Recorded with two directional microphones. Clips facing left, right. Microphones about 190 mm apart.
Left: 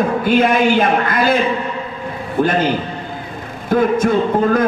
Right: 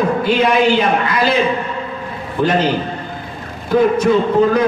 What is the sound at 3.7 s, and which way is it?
Speech, 50° left (ahead or behind).